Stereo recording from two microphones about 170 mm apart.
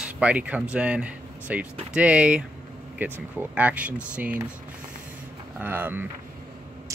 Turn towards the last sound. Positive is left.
turn(degrees=-10)  # may be behind; listen again after turning